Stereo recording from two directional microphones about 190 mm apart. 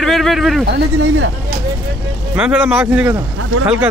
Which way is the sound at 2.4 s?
10° right (ahead or behind).